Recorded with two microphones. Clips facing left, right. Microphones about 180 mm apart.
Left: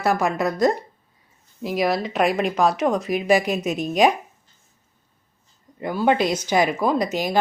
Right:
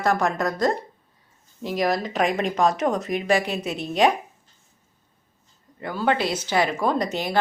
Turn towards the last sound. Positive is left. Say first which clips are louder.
# left 2 dB
turn(degrees=10)  # may be behind; listen again after turning